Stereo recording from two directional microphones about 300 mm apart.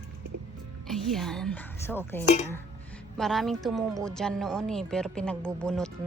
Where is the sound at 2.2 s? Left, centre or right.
Left.